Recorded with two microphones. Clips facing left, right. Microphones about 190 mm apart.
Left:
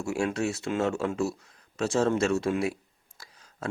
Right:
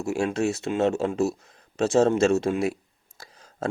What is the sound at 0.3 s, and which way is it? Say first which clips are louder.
Speech: right 4 dB; 25° right (ahead or behind).